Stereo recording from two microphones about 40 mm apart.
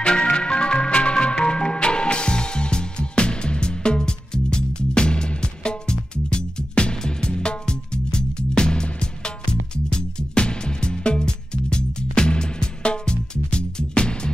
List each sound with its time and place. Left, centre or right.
0.0 s music: left